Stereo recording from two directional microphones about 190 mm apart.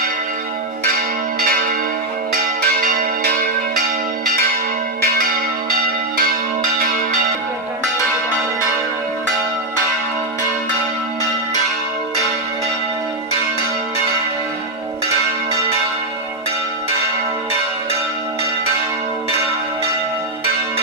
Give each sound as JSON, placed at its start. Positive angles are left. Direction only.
{"t": 2.3, "sound": "change ringing", "side_deg": -50}
{"t": 6.1, "sound": "change ringing", "side_deg": -50}